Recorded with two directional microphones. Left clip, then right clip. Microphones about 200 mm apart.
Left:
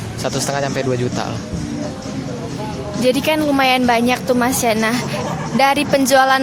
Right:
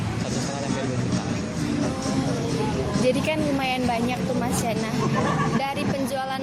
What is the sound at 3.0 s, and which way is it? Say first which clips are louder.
A woman's voice: left 9 dB; 35° left (ahead or behind).